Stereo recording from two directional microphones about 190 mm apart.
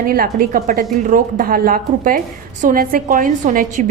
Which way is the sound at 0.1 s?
50° right (ahead or behind).